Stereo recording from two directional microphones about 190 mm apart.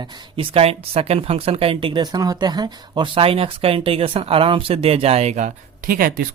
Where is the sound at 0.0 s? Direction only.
25° right (ahead or behind).